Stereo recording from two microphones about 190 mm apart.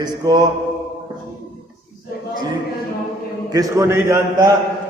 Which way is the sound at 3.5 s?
15° right (ahead or behind).